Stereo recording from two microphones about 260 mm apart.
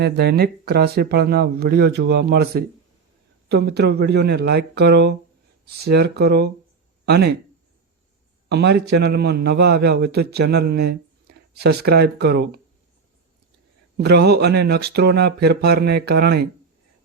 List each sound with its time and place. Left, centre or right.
0.0 s speech: right
8.4 s speech: right
14.0 s speech: right